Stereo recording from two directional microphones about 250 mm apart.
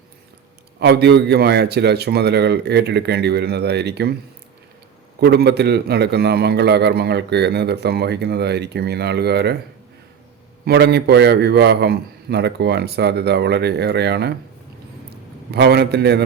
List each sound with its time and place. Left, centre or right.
0.8 s a man's voice: right
5.2 s a man's voice: right
10.7 s a man's voice: right
15.5 s a man's voice: right